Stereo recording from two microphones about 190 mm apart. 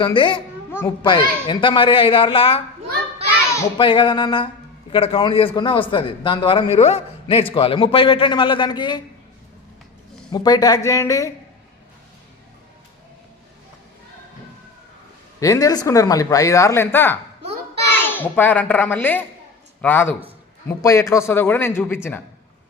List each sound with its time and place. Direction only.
0.0 s a man's voice: 25° left (ahead or behind)
3.8 s a man's voice: 25° left (ahead or behind)
10.3 s speech: 20° left (ahead or behind)
15.4 s speech: 20° left (ahead or behind)